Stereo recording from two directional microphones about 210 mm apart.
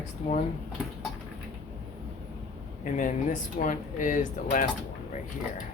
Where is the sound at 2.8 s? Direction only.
40° left (ahead or behind).